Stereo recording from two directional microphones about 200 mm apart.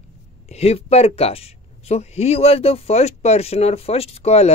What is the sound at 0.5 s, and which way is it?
Speech, 30° left (ahead or behind).